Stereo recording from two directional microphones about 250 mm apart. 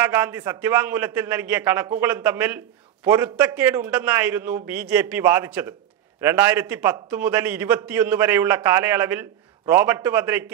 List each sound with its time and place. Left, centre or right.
0.0 s a man's voice: centre